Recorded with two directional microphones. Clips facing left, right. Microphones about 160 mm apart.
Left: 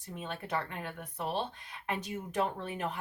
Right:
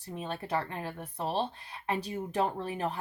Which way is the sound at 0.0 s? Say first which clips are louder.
Right 3 dB; 35° right (ahead or behind).